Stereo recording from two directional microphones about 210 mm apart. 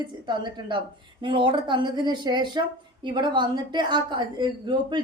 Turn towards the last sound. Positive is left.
turn(degrees=-20)  # may be behind; listen again after turning